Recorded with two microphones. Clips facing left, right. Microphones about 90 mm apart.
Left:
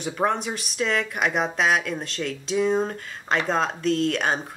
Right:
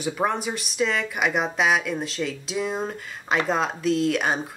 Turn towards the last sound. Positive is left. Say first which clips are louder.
# even
turn(degrees=-5)  # may be behind; listen again after turning